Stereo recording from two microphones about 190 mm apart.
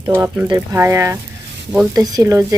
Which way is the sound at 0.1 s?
10° right (ahead or behind).